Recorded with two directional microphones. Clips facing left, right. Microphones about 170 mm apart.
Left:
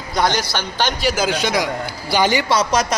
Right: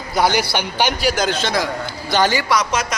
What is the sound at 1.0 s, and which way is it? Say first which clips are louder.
A man's voice: even; 5° left (ahead or behind).